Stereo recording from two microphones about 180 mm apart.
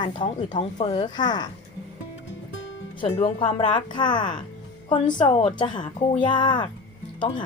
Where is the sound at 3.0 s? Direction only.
30° left (ahead or behind).